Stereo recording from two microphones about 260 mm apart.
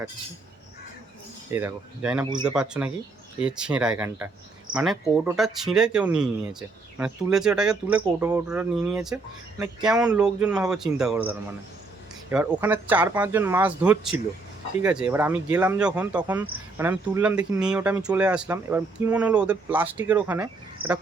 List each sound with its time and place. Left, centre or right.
1.5 s speech: centre
8.0 s speech: centre
8.4 s speech: centre